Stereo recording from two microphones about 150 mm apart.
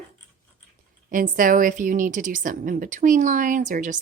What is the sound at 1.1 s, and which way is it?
A woman's voice, 65° right (ahead or behind).